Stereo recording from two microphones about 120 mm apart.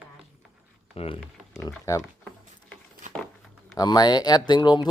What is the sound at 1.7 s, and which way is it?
Speech, 25° left (ahead or behind).